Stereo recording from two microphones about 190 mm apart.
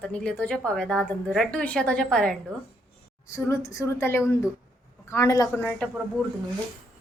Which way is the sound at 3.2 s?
15° left (ahead or behind).